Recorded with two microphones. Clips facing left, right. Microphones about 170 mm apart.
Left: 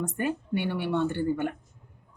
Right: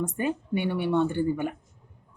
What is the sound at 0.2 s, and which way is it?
Speech, 15° right (ahead or behind).